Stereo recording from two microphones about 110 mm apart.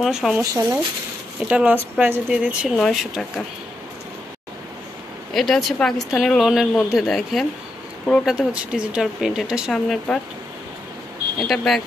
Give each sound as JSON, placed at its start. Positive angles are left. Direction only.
{"t": 0.0, "sound": "speech", "side_deg": 0}
{"t": 0.4, "sound": "speech", "side_deg": -30}
{"t": 1.4, "sound": "speech", "side_deg": -10}
{"t": 2.8, "sound": "speech", "side_deg": 0}
{"t": 5.3, "sound": "speech", "side_deg": 0}
{"t": 11.3, "sound": "speech", "side_deg": 0}